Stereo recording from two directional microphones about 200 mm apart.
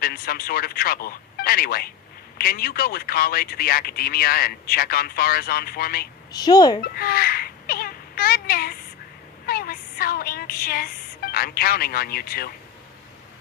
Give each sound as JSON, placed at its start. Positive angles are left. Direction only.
{"t": 0.0, "sound": "speech", "side_deg": 50}
{"t": 6.3, "sound": "speech", "side_deg": 20}
{"t": 6.9, "sound": "babbling", "side_deg": 50}
{"t": 9.5, "sound": "speech", "side_deg": 50}